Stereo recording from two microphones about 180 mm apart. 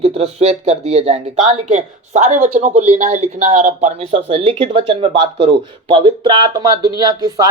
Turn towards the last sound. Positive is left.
turn(degrees=-20)  # may be behind; listen again after turning